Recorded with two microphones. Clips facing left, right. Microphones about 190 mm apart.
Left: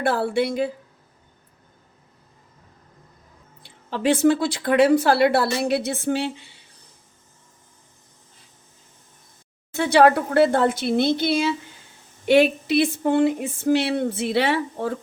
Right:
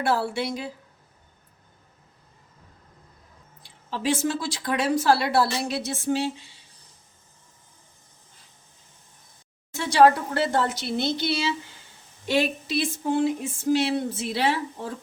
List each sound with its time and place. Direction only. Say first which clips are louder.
0.0 s speech: left 4 dB; 55° left (ahead or behind)
3.6 s speech: left 5 dB; 60° left (ahead or behind)
9.7 s speech: left 2 dB; 60° left (ahead or behind)